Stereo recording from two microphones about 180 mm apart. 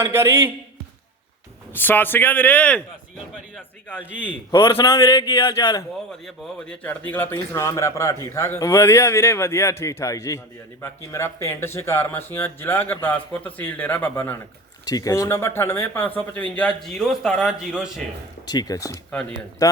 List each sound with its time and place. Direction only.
0.0 s a man's voice: 15° right (ahead or behind)
1.7 s a man's voice: 10° left (ahead or behind)
6.1 s a man's voice: centre (ahead or behind)
18.4 s speech: 20° left (ahead or behind)